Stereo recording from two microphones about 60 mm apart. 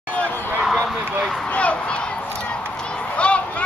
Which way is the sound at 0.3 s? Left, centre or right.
Left.